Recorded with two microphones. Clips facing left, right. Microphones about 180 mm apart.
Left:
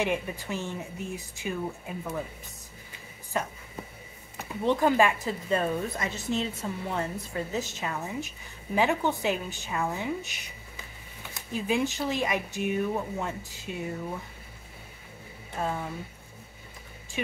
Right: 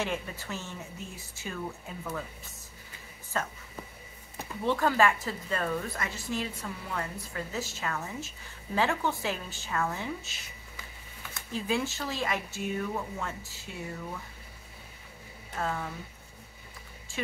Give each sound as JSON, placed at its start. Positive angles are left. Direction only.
{"t": 0.0, "sound": "speech", "side_deg": 15}
{"t": 3.3, "sound": "speech", "side_deg": 15}
{"t": 4.6, "sound": "a woman's voice", "side_deg": 20}
{"t": 15.5, "sound": "speech", "side_deg": 15}